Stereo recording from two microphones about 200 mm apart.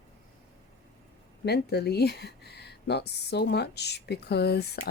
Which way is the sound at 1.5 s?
55° left (ahead or behind).